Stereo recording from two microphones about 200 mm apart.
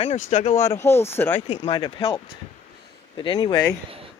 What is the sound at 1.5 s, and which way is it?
Speech, 25° left (ahead or behind).